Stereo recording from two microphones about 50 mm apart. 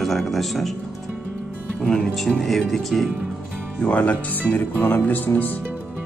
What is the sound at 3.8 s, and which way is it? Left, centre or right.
Speech, left.